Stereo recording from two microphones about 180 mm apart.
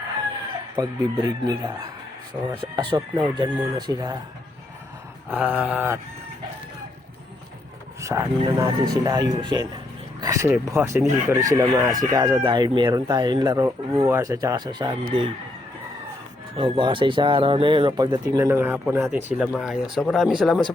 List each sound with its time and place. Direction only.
0.8 s speech: 20° right (ahead or behind)
5.3 s a sound: 5° right (ahead or behind)
8.0 s speech: 15° right (ahead or behind)
16.6 s speech: 25° right (ahead or behind); by 20.7 s 5° left (ahead or behind)